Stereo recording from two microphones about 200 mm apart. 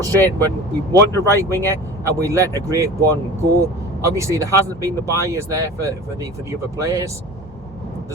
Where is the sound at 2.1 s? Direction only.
15° right (ahead or behind).